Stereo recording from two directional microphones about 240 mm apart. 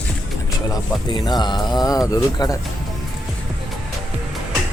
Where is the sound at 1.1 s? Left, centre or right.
Centre.